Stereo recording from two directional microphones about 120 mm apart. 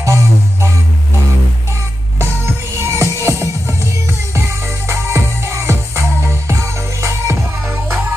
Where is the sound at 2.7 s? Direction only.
20° right (ahead or behind).